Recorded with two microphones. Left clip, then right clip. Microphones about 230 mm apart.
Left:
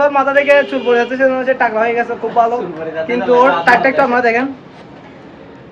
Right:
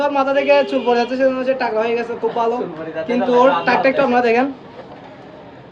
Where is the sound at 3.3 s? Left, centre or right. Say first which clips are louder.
Left 3 dB; right.